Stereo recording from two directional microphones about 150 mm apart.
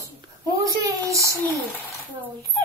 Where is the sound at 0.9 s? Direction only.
20° right (ahead or behind).